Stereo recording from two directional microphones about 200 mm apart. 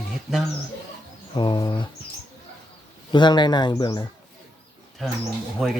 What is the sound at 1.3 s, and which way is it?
Speech, 20° left (ahead or behind).